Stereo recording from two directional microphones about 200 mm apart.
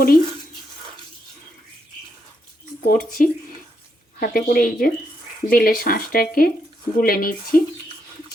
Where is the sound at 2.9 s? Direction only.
45° left (ahead or behind).